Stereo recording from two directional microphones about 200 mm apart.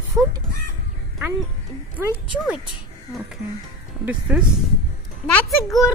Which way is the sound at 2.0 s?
5° right (ahead or behind).